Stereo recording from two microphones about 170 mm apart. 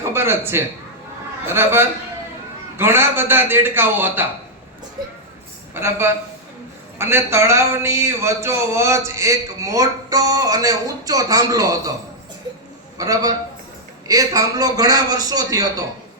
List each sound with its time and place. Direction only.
0.1 s a man's voice: 15° right (ahead or behind)
5.7 s a man's voice: 15° right (ahead or behind)
13.0 s speech: 20° right (ahead or behind)